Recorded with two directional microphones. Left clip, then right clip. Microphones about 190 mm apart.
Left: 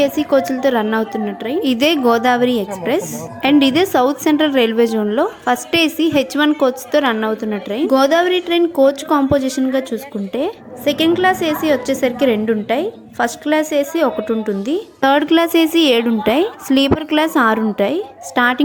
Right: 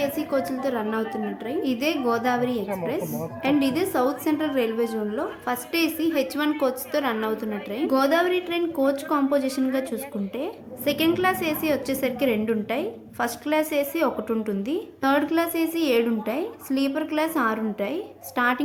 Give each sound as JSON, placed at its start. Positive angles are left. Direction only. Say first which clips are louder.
{"t": 0.0, "sound": "a woman's voice", "louder": "left 10 dB", "side_deg": 35}